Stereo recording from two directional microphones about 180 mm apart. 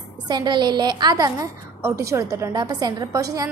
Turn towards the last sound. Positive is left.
turn(degrees=-20)  # may be behind; listen again after turning